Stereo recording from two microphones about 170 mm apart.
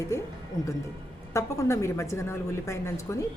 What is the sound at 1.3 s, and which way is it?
A woman's voice, 15° left (ahead or behind).